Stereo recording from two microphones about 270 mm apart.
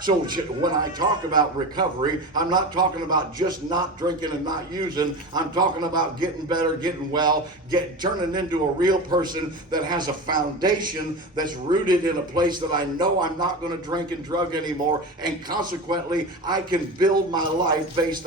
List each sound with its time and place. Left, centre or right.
0.0 s a man's voice: centre
11.3 s a man's voice: centre